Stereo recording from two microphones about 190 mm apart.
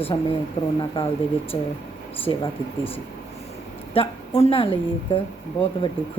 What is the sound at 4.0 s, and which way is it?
Speech, 30° left (ahead or behind).